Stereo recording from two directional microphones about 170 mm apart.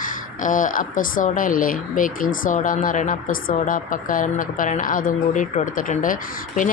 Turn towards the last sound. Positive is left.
turn(degrees=50)  # may be behind; listen again after turning